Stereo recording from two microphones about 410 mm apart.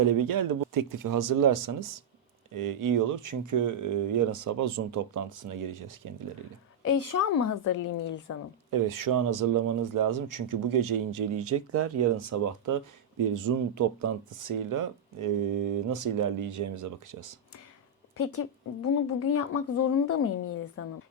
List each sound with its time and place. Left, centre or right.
0.0 s speech: right
6.8 s a woman's voice: left
7.6 s a woman's voice: left
8.7 s speech: right
11.3 s speech: right
18.2 s speech: left